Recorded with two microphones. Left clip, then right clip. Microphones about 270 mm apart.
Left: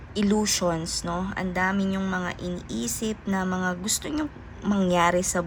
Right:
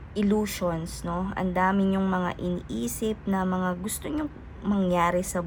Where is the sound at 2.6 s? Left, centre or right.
Centre.